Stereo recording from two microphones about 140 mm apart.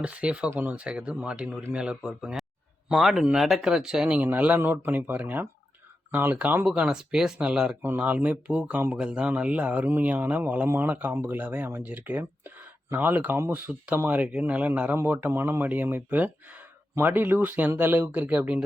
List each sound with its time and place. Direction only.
0.0 s speech: 10° right (ahead or behind)